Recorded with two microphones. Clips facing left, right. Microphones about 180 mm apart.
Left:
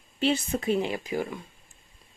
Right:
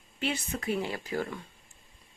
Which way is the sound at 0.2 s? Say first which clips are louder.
Left 7 dB; 30° left (ahead or behind).